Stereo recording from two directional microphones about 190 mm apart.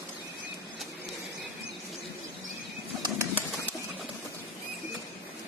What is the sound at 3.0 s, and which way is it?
Bird, 15° right (ahead or behind).